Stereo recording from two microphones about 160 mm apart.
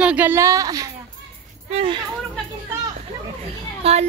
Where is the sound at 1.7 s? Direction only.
35° right (ahead or behind).